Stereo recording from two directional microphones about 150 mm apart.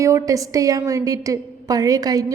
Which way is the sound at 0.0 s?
20° right (ahead or behind).